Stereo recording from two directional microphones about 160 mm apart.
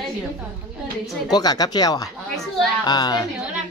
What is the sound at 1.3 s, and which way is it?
Speech, 25° left (ahead or behind).